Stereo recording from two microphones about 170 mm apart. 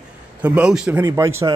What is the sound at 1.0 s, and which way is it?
Speech, 15° right (ahead or behind).